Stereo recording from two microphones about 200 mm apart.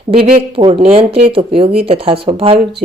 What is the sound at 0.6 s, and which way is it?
A woman's voice, 25° right (ahead or behind).